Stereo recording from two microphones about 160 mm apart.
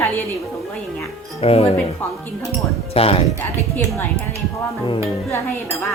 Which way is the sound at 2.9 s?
35° left (ahead or behind).